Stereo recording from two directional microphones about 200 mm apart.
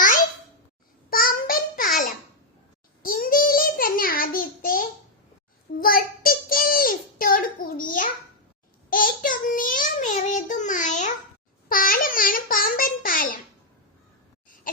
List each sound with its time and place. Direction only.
1.1 s a sound: 45° left (ahead or behind)
3.0 s child singing: 45° left (ahead or behind)
11.7 s babbling: 45° left (ahead or behind)